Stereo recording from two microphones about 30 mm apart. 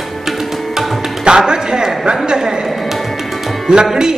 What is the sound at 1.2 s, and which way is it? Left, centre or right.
A woman's voice, right.